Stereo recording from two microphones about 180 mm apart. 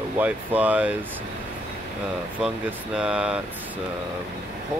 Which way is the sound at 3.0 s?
5° right (ahead or behind).